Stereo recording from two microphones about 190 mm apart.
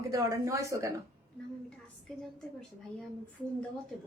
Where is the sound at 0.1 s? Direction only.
15° right (ahead or behind).